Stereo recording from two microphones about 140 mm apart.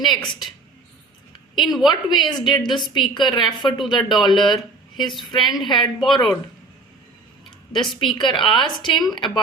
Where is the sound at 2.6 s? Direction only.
35° left (ahead or behind).